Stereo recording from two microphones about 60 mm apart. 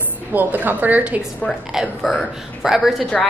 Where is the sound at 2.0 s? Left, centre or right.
Centre.